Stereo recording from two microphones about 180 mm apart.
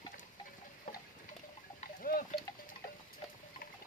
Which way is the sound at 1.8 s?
55° left (ahead or behind).